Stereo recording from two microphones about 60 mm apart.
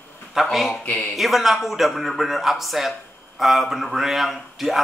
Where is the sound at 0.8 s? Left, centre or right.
Left.